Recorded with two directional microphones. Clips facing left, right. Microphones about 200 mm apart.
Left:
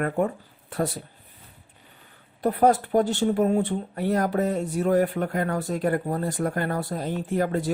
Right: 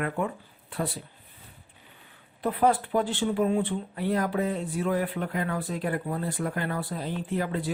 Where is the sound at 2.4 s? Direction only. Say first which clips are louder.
Left 4 dB; 45° left (ahead or behind).